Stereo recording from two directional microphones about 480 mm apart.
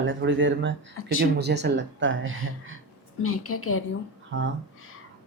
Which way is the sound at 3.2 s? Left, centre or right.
Left.